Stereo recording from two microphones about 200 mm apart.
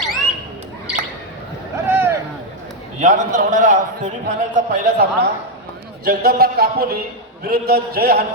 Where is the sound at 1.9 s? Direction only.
10° right (ahead or behind).